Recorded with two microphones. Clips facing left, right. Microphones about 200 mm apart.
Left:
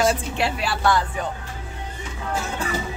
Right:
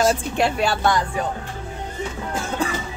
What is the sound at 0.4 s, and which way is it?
Speech, 45° right (ahead or behind).